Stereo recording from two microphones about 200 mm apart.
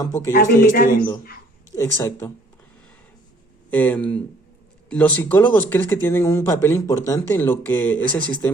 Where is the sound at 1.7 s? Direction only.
15° left (ahead or behind).